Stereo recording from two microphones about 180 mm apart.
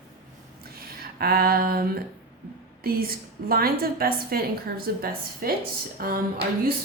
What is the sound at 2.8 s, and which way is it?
A woman's voice, 55° right (ahead or behind).